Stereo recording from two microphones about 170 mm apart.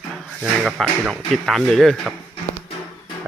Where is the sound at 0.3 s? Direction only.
5° right (ahead or behind).